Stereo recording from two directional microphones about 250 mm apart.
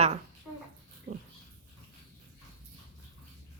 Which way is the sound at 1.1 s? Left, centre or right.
Right.